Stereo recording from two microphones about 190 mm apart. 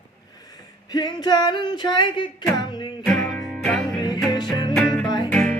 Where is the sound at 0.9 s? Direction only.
20° left (ahead or behind).